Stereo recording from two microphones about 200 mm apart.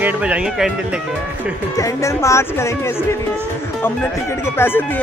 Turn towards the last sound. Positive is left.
turn(degrees=10)  # may be behind; listen again after turning